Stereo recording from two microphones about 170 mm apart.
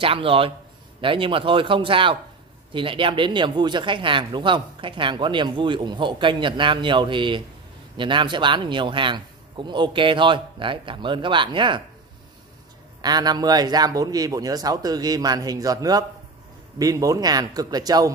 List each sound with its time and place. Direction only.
0.0 s speech: 35° right (ahead or behind)
13.0 s speech: 25° right (ahead or behind)